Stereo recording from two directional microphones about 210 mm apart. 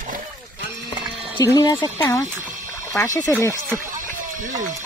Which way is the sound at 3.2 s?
15° left (ahead or behind).